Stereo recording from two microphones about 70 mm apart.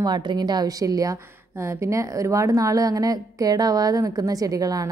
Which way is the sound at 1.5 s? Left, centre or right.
Right.